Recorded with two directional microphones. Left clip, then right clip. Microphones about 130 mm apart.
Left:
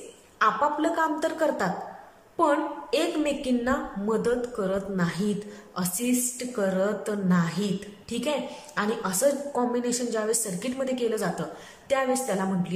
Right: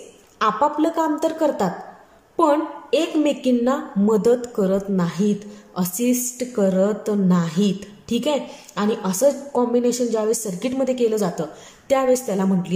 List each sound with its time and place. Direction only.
0.4 s a woman's voice: 25° right (ahead or behind)